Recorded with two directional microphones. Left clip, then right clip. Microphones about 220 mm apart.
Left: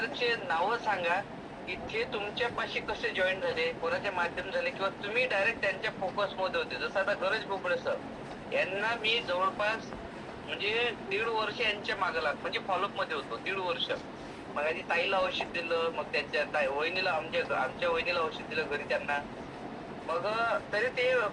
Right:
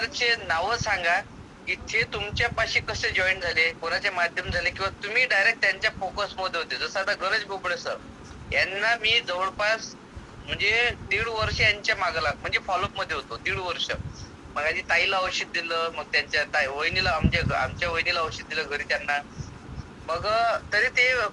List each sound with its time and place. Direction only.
0.0 s a man's voice: 50° right (ahead or behind)